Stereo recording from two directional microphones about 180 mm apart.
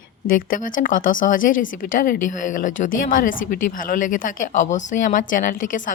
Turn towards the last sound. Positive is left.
turn(degrees=45)  # may be behind; listen again after turning